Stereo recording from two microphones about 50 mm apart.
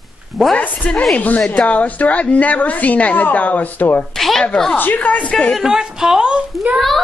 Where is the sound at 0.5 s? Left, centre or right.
Left.